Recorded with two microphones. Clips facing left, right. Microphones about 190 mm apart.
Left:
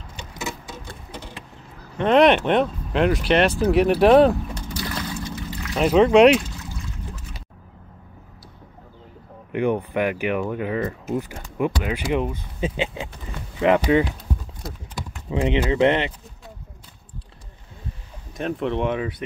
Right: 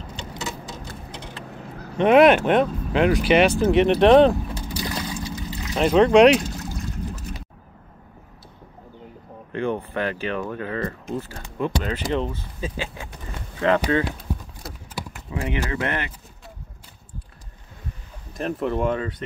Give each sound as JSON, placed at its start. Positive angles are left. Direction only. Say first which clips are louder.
{"t": 2.1, "sound": "speech", "louder": "right 1 dB", "side_deg": -5}
{"t": 4.6, "sound": "vehicle", "louder": "right 1 dB", "side_deg": -15}
{"t": 5.8, "sound": "speech", "louder": "even", "side_deg": 0}
{"t": 6.4, "sound": "trickle", "louder": "right 5 dB", "side_deg": -40}
{"t": 9.5, "sound": "speech", "louder": "left 3 dB", "side_deg": 15}
{"t": 14.6, "sound": "clip-clop", "louder": "left 1 dB", "side_deg": -5}
{"t": 15.3, "sound": "speech", "louder": "left 6 dB", "side_deg": 20}
{"t": 18.4, "sound": "speech", "louder": "even", "side_deg": 0}
{"t": 18.9, "sound": "speech", "louder": "left 1 dB", "side_deg": 10}